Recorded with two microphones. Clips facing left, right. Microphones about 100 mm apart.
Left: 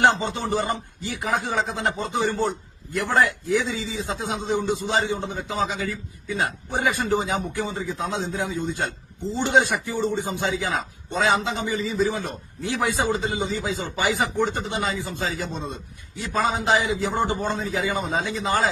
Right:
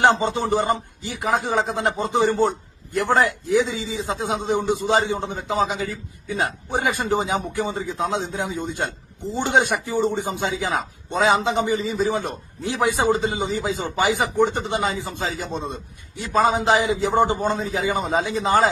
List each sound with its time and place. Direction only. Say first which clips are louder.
0.0 s a man's voice: right 2 dB; 20° right (ahead or behind)
16.6 s a man's voice: right 3 dB; 20° right (ahead or behind)